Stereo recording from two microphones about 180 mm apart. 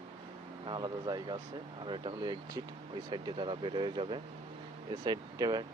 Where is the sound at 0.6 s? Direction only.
25° right (ahead or behind).